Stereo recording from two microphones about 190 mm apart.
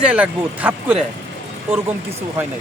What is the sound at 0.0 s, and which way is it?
Speech, 5° right (ahead or behind).